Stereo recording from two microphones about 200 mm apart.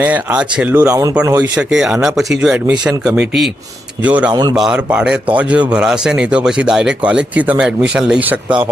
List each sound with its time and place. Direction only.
0.0 s speech: 10° right (ahead or behind)
1.5 s speech: 5° right (ahead or behind)
4.3 s speech: 20° right (ahead or behind)
4.5 s speech: 5° right (ahead or behind)